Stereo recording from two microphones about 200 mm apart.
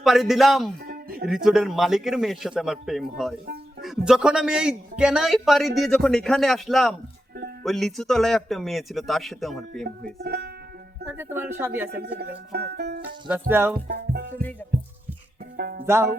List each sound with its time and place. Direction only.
0.0 s a man's voice: centre (ahead or behind)
0.9 s music: 50° right (ahead or behind)
1.3 s a man's voice: centre (ahead or behind)
9.8 s speech: 50° right (ahead or behind)
11.1 s speech: 10° right (ahead or behind)
11.9 s speech: 55° right (ahead or behind)
12.5 s music: 55° right (ahead or behind)
13.5 s speech: 10° right (ahead or behind)
13.8 s speech: 55° right (ahead or behind)
15.5 s speech: 50° right (ahead or behind)